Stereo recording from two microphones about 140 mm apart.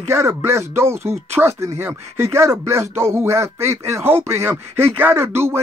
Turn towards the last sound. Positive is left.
turn(degrees=-15)  # may be behind; listen again after turning